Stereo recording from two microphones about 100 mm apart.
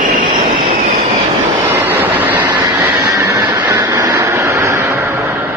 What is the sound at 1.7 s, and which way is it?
Vehicle, 20° right (ahead or behind).